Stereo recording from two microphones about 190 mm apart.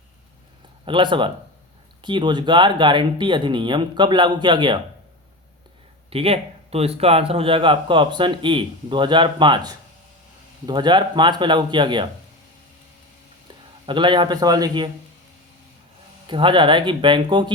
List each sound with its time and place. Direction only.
0.9 s a man's voice: 25° right (ahead or behind)
6.1 s a man's voice: 30° right (ahead or behind)
13.8 s a man's voice: 25° right (ahead or behind)
16.2 s a man's voice: 25° right (ahead or behind)